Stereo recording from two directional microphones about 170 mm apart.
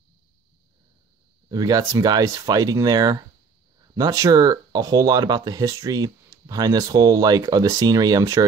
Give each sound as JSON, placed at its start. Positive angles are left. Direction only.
{"t": 1.5, "sound": "speech", "side_deg": -20}